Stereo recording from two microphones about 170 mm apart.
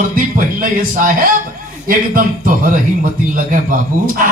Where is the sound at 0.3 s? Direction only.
55° right (ahead or behind).